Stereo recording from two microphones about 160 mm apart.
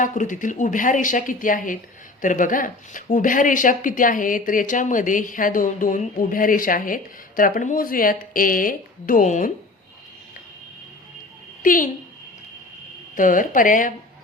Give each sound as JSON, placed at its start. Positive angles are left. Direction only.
{"t": 0.0, "sound": "speech", "side_deg": 50}
{"t": 11.6, "sound": "a child's voice", "side_deg": 60}
{"t": 13.1, "sound": "speech", "side_deg": 55}